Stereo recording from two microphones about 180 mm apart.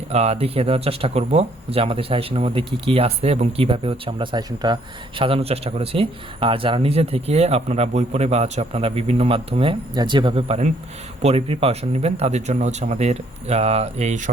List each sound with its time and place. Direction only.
0.1 s speech: 35° right (ahead or behind)